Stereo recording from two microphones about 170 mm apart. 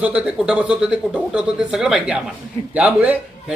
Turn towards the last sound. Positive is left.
turn(degrees=-5)  # may be behind; listen again after turning